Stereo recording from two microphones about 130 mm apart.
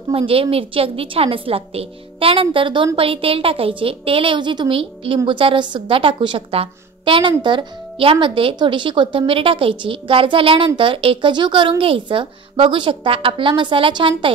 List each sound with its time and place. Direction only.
0.1 s a woman's voice: 45° right (ahead or behind)